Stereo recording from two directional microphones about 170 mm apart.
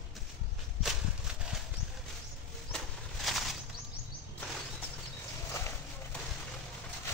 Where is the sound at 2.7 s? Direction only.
Centre (ahead or behind).